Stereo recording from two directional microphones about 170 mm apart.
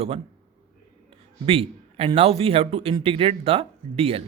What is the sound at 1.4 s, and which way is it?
Speech, 35° right (ahead or behind).